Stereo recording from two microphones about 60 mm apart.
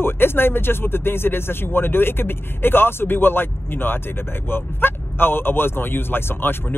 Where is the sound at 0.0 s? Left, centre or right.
Left.